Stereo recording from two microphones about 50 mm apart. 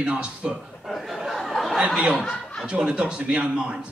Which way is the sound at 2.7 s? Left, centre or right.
Right.